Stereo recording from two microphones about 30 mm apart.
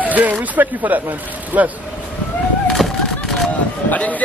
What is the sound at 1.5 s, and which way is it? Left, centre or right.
Speech, right.